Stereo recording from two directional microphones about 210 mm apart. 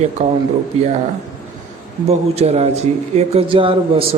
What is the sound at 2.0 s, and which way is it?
A man's voice, 30° right (ahead or behind).